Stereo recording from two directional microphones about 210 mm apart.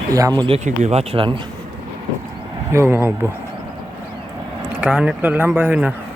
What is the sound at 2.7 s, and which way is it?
Speech, 10° right (ahead or behind).